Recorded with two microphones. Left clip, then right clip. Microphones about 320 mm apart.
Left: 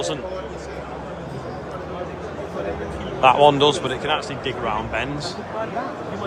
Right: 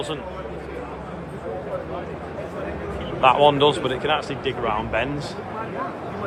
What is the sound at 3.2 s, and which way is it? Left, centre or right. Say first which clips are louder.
Speech: left 2 dB; centre.